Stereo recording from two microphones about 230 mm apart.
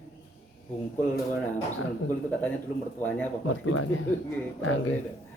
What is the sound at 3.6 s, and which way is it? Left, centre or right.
Speech, left.